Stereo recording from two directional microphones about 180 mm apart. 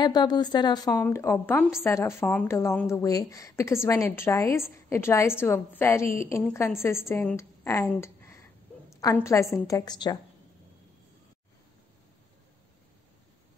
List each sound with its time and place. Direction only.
0.0 s a woman's voice: 25° left (ahead or behind)